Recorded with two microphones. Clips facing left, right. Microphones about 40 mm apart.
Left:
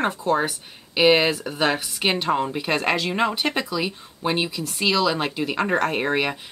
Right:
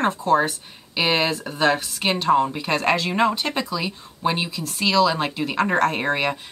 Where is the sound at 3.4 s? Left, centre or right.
Centre.